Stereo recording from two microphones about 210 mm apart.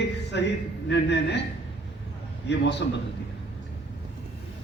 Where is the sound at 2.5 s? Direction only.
55° left (ahead or behind).